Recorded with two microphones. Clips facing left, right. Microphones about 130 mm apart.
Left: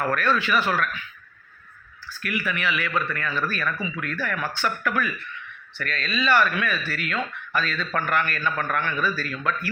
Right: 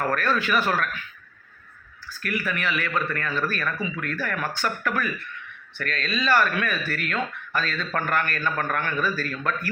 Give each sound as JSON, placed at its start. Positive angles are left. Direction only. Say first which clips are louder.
{"t": 0.1, "sound": "speech", "louder": "left 1 dB", "side_deg": -45}
{"t": 2.2, "sound": "speech", "louder": "even", "side_deg": -40}